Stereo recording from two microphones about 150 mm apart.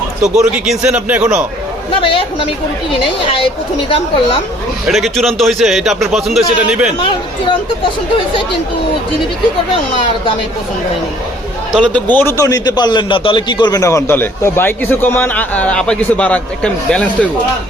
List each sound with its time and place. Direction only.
0.2 s a man's voice: 5° right (ahead or behind)
3.3 s speech: 35° left (ahead or behind)
4.9 s a man's voice: centre (ahead or behind)
11.7 s a man's voice: 5° left (ahead or behind)